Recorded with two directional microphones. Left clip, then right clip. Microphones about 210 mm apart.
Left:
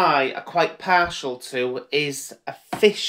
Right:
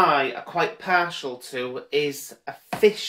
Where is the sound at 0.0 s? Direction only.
15° left (ahead or behind).